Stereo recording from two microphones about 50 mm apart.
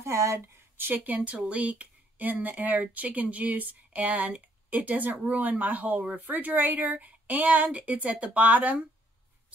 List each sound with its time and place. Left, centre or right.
0.0 s speech: right
0.7 s speech: right